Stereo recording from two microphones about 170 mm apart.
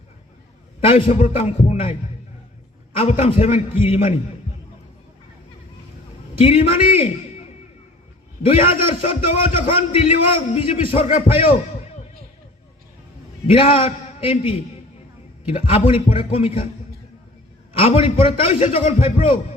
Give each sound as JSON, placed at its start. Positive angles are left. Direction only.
{"t": 0.9, "sound": "a man's voice", "side_deg": 35}
{"t": 3.0, "sound": "a man's voice", "side_deg": 40}
{"t": 6.4, "sound": "a man's voice", "side_deg": 35}
{"t": 8.4, "sound": "a man's voice", "side_deg": 35}
{"t": 13.5, "sound": "a man's voice", "side_deg": 30}
{"t": 17.7, "sound": "a man's voice", "side_deg": 35}